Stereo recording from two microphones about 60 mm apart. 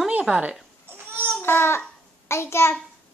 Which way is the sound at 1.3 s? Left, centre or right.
Left.